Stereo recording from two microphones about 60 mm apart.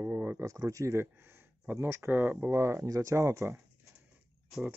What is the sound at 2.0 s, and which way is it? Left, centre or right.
Speech, right.